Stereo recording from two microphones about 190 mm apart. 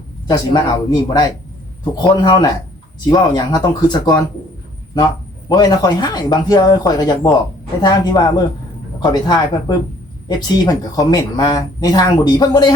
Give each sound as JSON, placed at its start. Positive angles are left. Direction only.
{"t": 0.3, "sound": "speech", "side_deg": 20}
{"t": 5.5, "sound": "speech", "side_deg": 20}